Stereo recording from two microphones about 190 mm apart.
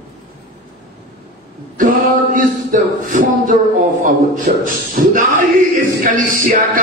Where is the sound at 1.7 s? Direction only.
45° right (ahead or behind).